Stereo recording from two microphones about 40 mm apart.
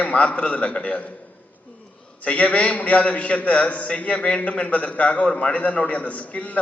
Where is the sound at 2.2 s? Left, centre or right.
Left.